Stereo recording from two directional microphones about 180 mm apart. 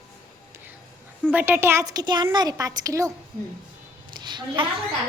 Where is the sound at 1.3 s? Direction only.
10° right (ahead or behind).